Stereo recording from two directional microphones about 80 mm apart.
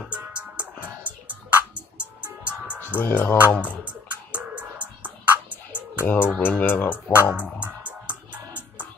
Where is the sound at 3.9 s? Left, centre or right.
Centre.